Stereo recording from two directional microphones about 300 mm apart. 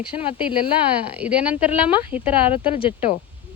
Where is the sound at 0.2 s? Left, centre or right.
Centre.